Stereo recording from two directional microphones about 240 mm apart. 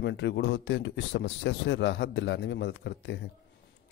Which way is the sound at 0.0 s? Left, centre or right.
Left.